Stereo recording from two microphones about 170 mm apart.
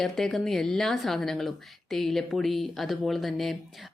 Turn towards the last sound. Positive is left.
turn(degrees=0)  # may be behind; listen again after turning